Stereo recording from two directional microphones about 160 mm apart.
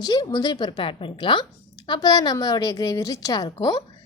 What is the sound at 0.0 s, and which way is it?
A woman's voice, 25° left (ahead or behind).